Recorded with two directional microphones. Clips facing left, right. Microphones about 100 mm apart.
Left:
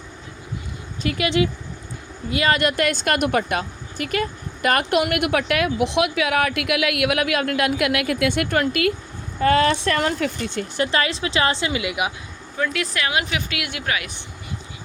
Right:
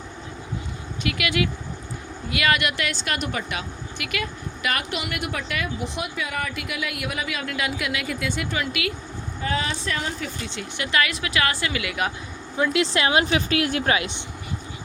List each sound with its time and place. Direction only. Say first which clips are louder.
1.0 s a woman's voice: left 4 dB; 30° left (ahead or behind); by 8.6 s 60° left (ahead or behind)
8.6 s speech: left 7 dB; 45° left (ahead or behind)
9.4 s speech: left 10 dB; 65° left (ahead or behind); by 12.1 s 15° left (ahead or behind)
12.5 s speech: right 3 dB; 20° right (ahead or behind)